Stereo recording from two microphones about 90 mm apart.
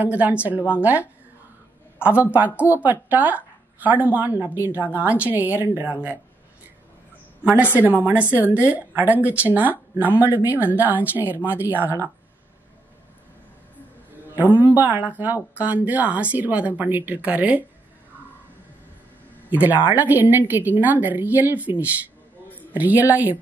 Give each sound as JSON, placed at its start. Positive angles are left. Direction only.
{"t": 0.0, "sound": "a woman's voice", "side_deg": -15}
{"t": 2.0, "sound": "a woman's voice", "side_deg": -15}
{"t": 7.7, "sound": "a woman's voice", "side_deg": -20}
{"t": 14.3, "sound": "a woman's voice", "side_deg": -20}
{"t": 19.9, "sound": "a woman's voice", "side_deg": -20}